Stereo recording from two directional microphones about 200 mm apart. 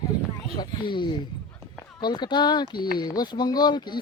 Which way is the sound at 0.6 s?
25° left (ahead or behind).